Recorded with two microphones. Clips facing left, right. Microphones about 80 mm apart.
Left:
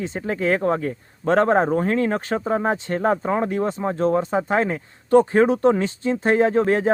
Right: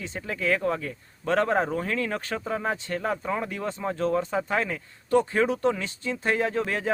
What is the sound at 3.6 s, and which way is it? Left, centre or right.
Speech, left.